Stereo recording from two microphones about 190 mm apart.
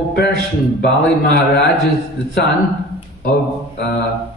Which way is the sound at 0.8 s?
60° left (ahead or behind).